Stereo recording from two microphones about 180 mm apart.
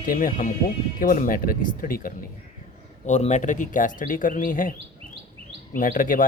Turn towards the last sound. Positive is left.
turn(degrees=50)  # may be behind; listen again after turning